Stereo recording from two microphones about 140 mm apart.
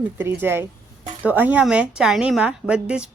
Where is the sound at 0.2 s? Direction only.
15° right (ahead or behind).